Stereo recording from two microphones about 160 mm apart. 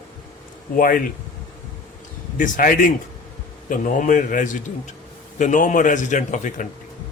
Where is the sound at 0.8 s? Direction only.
60° left (ahead or behind).